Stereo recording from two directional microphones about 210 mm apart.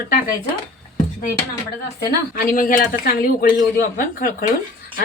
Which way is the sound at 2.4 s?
40° left (ahead or behind).